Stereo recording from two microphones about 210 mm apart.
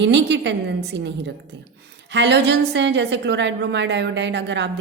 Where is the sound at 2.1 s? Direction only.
55° right (ahead or behind).